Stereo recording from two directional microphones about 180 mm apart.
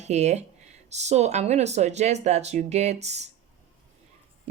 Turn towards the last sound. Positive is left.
turn(degrees=-40)  # may be behind; listen again after turning